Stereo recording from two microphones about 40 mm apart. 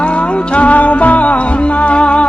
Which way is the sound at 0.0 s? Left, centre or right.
Left.